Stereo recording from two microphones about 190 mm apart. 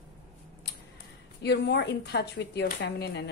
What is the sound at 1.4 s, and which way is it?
A woman's voice, 60° left (ahead or behind).